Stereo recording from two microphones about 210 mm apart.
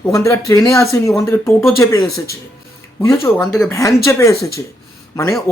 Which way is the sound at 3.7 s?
15° left (ahead or behind).